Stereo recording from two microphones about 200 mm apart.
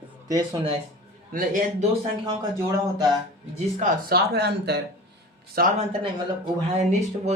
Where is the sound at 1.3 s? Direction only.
45° right (ahead or behind).